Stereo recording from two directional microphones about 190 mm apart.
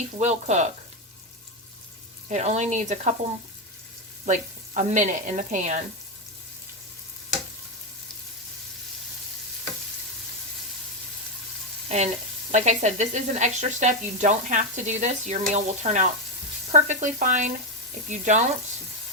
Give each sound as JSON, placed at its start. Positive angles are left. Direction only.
{"t": 0.2, "sound": "speech", "side_deg": -35}
{"t": 2.3, "sound": "speech", "side_deg": -35}
{"t": 4.3, "sound": "speech", "side_deg": -40}
{"t": 11.9, "sound": "speech", "side_deg": -35}